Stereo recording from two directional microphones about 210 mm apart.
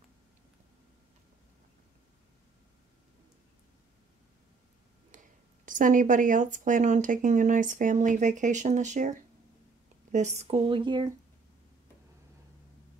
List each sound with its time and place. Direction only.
5.1 s whispering: 40° right (ahead or behind)
5.7 s speech: 40° right (ahead or behind)
10.1 s speech: 35° right (ahead or behind)